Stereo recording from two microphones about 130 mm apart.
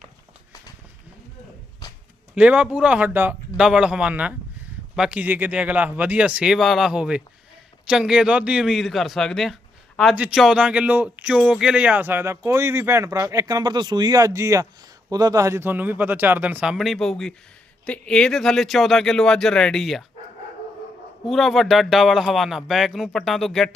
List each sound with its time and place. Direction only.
2.3 s a man's voice: 10° right (ahead or behind)
21.2 s a man's voice: centre (ahead or behind)